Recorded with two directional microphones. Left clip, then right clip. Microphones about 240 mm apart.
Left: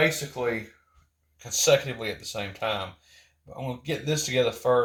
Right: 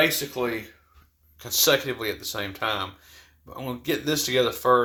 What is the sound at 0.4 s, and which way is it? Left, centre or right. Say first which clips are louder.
Speech: even; right.